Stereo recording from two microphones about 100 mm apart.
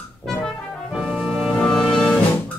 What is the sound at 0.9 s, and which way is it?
Music, 5° right (ahead or behind).